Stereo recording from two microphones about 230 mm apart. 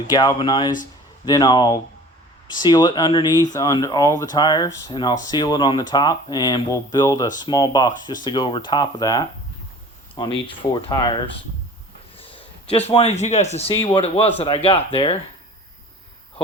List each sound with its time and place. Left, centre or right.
0.1 s speech: centre